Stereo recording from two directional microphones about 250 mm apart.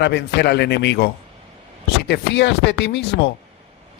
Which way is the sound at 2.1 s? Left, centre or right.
Left.